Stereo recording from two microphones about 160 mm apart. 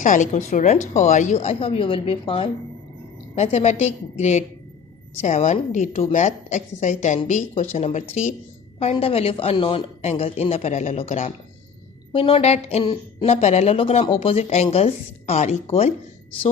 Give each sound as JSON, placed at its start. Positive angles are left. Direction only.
{"t": 0.0, "sound": "a woman's voice", "side_deg": 50}